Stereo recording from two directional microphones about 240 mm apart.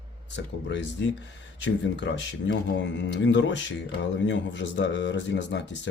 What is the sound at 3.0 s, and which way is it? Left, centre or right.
Speech, left.